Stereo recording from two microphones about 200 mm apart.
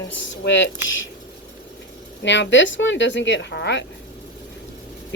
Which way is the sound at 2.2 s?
60° left (ahead or behind).